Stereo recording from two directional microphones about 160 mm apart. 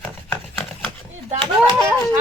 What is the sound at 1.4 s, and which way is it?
Speech, 20° right (ahead or behind).